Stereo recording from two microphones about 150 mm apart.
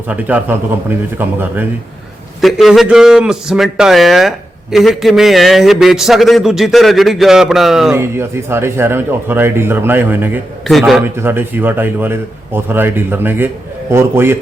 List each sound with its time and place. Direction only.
0.1 s speech: 10° right (ahead or behind)
2.4 s a man's voice: centre (ahead or behind)
7.9 s speech: 15° right (ahead or behind)
10.7 s a man's voice: centre (ahead or behind)
11.0 s speech: 15° right (ahead or behind)